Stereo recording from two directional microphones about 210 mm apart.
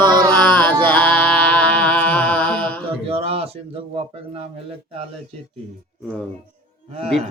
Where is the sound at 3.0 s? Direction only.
25° right (ahead or behind).